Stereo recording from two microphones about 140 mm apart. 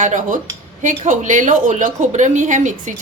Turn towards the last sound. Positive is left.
turn(degrees=-65)  # may be behind; listen again after turning